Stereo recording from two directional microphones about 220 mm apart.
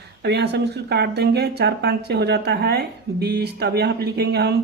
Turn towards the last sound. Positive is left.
turn(degrees=-50)  # may be behind; listen again after turning